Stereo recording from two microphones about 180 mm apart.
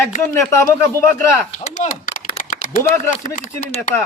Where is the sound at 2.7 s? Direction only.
50° left (ahead or behind).